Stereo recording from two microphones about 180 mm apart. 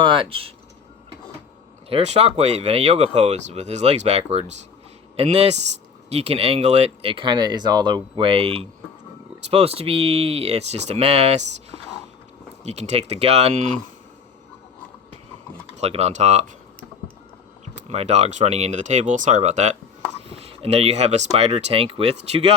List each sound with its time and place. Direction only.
0.0 s speech: 25° right (ahead or behind)
1.9 s speech: 35° right (ahead or behind)
15.8 s speech: 35° right (ahead or behind)
17.8 s speech: 35° right (ahead or behind)